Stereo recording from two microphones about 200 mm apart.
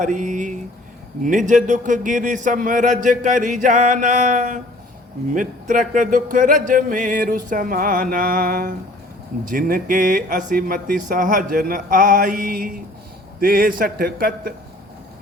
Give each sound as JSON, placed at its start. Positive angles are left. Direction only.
{"t": 0.0, "sound": "a man's voice", "side_deg": -40}